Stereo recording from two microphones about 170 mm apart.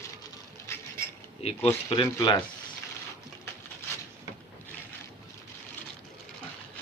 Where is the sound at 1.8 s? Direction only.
25° left (ahead or behind).